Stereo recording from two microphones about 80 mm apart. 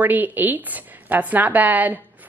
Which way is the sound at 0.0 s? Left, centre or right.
Right.